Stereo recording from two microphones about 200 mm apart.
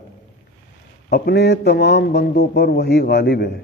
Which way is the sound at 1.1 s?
55° left (ahead or behind).